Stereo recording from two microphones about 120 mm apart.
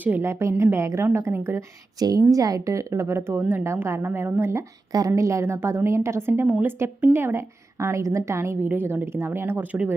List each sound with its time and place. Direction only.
0.0 s a woman's voice: 20° right (ahead or behind)